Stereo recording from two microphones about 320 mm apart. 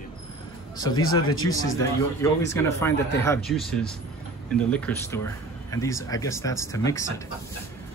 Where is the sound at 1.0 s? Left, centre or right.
Left.